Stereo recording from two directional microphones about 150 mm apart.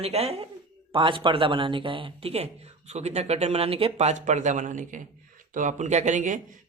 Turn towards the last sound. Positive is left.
turn(degrees=-55)  # may be behind; listen again after turning